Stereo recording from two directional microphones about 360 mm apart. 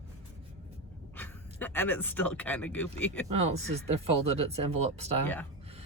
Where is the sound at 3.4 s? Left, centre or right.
Centre.